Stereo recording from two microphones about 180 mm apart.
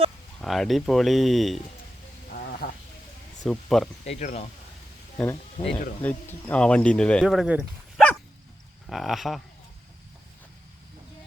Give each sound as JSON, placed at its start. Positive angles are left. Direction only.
{"t": 0.4, "sound": "speech", "side_deg": 0}
{"t": 2.5, "sound": "sheep", "side_deg": 55}
{"t": 3.4, "sound": "speech", "side_deg": 0}
{"t": 4.0, "sound": "speech", "side_deg": 40}
{"t": 5.1, "sound": "speech", "side_deg": 10}